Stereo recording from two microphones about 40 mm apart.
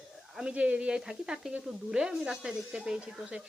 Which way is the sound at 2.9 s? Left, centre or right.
Right.